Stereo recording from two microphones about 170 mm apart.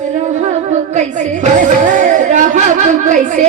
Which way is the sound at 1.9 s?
45° right (ahead or behind).